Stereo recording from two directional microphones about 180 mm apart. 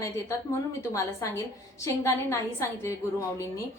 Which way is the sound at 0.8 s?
15° left (ahead or behind).